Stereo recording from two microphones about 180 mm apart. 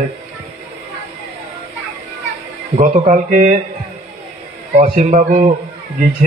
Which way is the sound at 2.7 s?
40° right (ahead or behind).